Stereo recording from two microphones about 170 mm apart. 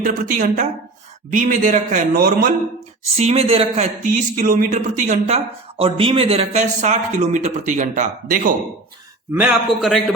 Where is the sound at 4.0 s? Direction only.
55° right (ahead or behind).